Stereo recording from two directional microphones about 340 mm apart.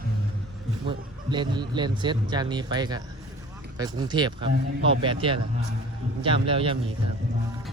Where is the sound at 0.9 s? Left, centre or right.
Centre.